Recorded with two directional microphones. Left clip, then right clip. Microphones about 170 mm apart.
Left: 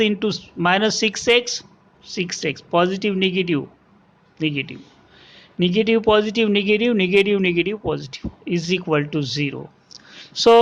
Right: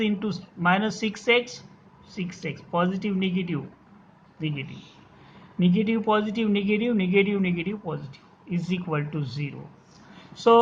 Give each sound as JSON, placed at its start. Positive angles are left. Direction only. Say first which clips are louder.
{"t": 0.0, "sound": "a man's voice", "louder": "left 9 dB", "side_deg": 40}